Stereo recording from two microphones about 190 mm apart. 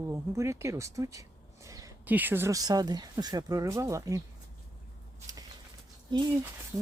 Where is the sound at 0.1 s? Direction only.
15° right (ahead or behind).